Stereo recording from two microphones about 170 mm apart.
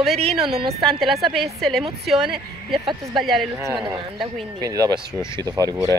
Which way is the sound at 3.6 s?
20° right (ahead or behind).